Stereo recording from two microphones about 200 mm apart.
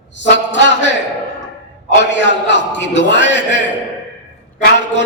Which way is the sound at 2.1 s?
65° left (ahead or behind).